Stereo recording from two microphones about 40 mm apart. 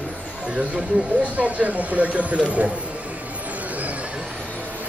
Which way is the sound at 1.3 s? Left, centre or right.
Right.